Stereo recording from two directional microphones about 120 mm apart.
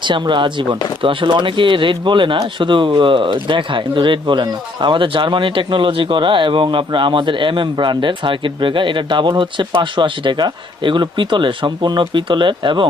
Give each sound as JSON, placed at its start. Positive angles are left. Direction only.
{"t": 0.0, "sound": "speech", "side_deg": -40}